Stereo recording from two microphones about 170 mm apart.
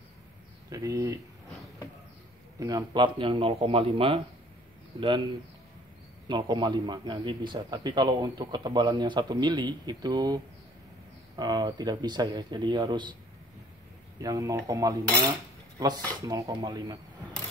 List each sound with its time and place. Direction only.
0.7 s a man's voice: 20° right (ahead or behind)
2.6 s a man's voice: 25° right (ahead or behind)
14.2 s a man's voice: 20° right (ahead or behind)